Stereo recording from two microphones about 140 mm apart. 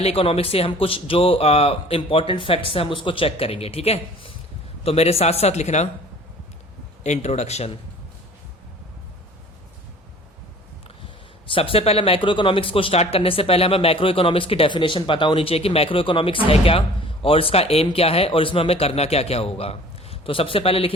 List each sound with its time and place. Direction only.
0.0 s speech: 45° left (ahead or behind)
7.0 s speech: 50° left (ahead or behind)
11.4 s speech: 40° left (ahead or behind)